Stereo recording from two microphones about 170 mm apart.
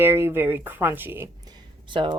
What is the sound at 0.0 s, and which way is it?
Speech, 15° right (ahead or behind).